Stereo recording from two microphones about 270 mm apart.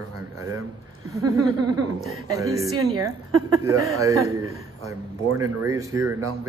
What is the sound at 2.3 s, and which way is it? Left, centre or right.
Speech, centre.